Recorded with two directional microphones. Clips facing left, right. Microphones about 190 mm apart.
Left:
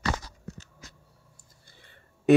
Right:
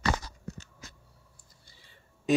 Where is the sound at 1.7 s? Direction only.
60° left (ahead or behind).